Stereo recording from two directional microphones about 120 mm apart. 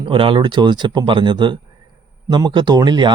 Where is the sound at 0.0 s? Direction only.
45° right (ahead or behind).